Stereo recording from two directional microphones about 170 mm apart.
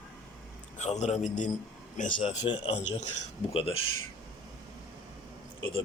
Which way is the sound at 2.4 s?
35° left (ahead or behind).